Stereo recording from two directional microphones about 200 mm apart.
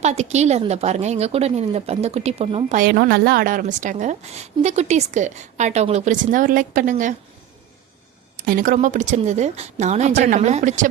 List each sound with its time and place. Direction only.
0.0 s a woman's voice: 35° right (ahead or behind)
2.7 s a woman's voice: 45° right (ahead or behind)
8.4 s a woman's voice: 45° right (ahead or behind)